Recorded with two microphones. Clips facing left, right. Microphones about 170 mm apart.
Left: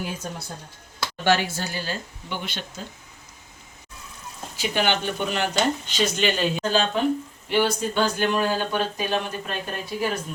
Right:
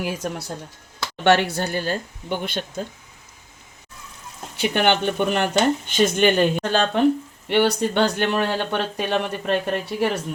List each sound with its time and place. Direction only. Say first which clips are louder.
0.0 s speech: right 5 dB; 75° right (ahead or behind)
1.2 s speech: right 5 dB; 65° right (ahead or behind)
4.5 s speech: right 4 dB; 60° right (ahead or behind)